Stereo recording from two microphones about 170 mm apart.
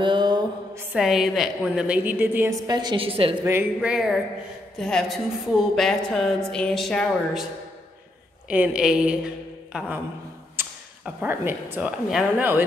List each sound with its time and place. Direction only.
0.0 s mantra: 25° right (ahead or behind)
0.9 s a woman's voice: 5° right (ahead or behind); by 3.3 s 35° right (ahead or behind)
3.3 s a woman's voice: 10° right (ahead or behind)
8.5 s a woman's voice: 5° right (ahead or behind)
10.6 s a sound: 10° right (ahead or behind)
11.1 s a woman's voice: 10° right (ahead or behind)